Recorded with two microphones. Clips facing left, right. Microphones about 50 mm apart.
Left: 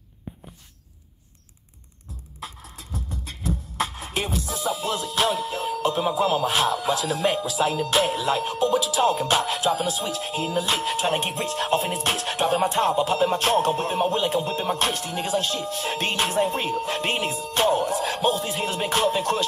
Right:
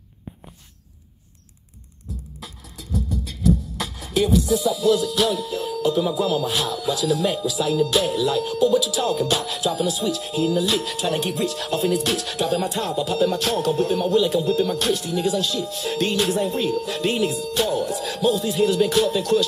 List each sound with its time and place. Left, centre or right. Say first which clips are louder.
2.4 s beatboxing: left 1 dB; left